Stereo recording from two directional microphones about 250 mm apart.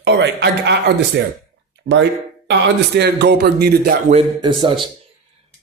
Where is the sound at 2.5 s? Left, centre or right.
Right.